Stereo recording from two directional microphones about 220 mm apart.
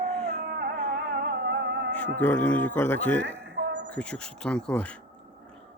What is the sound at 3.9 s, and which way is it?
Speech, 5° left (ahead or behind).